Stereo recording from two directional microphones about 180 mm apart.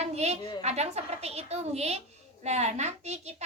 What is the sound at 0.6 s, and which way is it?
A woman's voice, 35° right (ahead or behind).